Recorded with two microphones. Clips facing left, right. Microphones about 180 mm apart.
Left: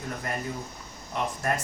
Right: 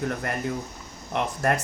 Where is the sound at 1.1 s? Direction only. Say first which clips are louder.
Right 4 dB; 70° right (ahead or behind).